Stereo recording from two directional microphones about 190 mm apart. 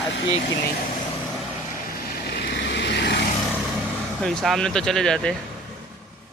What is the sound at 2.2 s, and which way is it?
Vehicle, 60° left (ahead or behind).